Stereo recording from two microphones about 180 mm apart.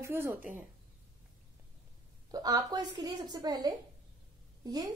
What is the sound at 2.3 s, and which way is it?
A woman's voice, 20° right (ahead or behind).